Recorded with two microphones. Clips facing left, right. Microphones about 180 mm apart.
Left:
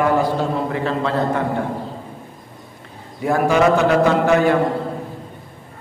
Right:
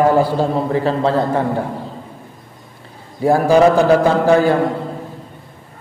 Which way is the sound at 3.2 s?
30° right (ahead or behind).